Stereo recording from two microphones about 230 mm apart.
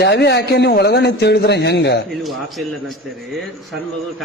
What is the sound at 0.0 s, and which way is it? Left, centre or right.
A man's voice, left.